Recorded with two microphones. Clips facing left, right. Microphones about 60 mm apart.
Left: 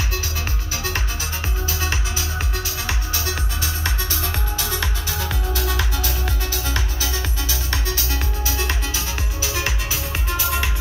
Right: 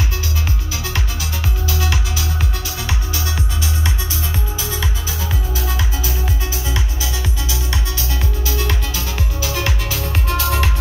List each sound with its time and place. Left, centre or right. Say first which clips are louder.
1.7 s music: right 3 dB; left
4.6 s music: right 1 dB; left
10.4 s music: right 3 dB; centre